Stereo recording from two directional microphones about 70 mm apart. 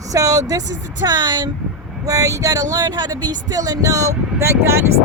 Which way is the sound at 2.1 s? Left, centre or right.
Right.